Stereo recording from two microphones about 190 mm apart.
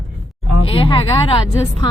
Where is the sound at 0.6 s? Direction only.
30° left (ahead or behind).